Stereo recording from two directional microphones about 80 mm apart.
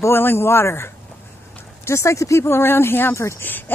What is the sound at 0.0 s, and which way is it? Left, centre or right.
Speech, left.